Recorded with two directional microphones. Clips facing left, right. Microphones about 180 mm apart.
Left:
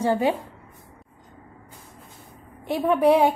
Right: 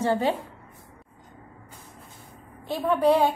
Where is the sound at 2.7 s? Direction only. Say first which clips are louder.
Left 3 dB; 20° left (ahead or behind).